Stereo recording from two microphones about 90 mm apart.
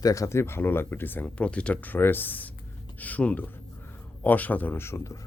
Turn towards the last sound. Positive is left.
turn(degrees=30)  # may be behind; listen again after turning